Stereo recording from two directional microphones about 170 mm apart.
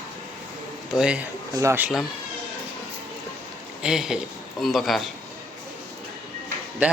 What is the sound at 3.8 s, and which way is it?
A man's voice, 5° right (ahead or behind).